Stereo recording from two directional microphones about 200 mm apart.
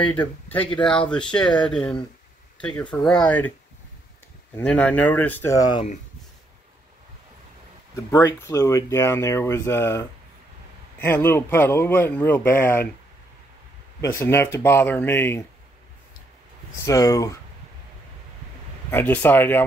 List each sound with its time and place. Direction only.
0.1 s speech: 10° left (ahead or behind)
4.6 s speech: 5° left (ahead or behind)
7.9 s speech: 15° left (ahead or behind)
14.0 s speech: 10° left (ahead or behind)
16.8 s speech: 15° left (ahead or behind)
18.9 s speech: 10° left (ahead or behind)